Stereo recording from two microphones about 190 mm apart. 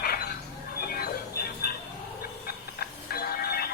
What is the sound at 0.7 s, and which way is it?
Music, 55° left (ahead or behind).